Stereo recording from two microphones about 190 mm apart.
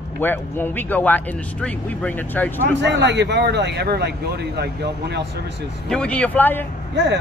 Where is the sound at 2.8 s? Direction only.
65° right (ahead or behind).